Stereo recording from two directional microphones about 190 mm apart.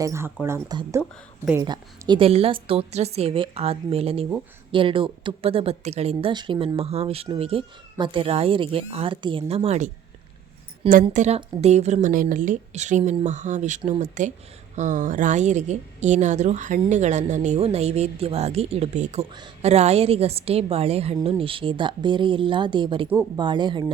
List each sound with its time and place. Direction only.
0.0 s speech: 15° right (ahead or behind); by 9.9 s 35° right (ahead or behind)
11.0 s speech: 35° right (ahead or behind)